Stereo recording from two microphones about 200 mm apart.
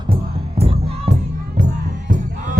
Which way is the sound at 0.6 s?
30° right (ahead or behind).